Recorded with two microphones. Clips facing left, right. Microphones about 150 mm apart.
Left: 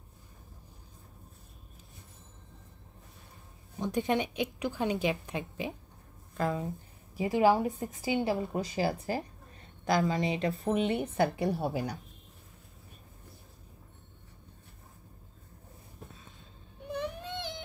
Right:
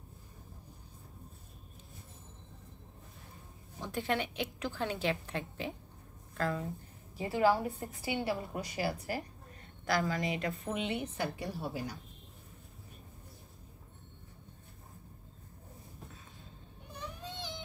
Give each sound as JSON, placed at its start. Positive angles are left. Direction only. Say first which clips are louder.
{"t": 3.8, "sound": "a woman's voice", "louder": "left 5 dB", "side_deg": 20}
{"t": 10.7, "sound": "a woman's voice", "louder": "left 8 dB", "side_deg": 45}
{"t": 11.1, "sound": "a woman's voice", "louder": "left 9 dB", "side_deg": 60}
{"t": 16.9, "sound": "baby cry", "louder": "left 9 dB", "side_deg": 65}